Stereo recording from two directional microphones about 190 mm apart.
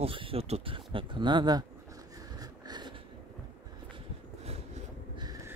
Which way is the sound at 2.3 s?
20° right (ahead or behind).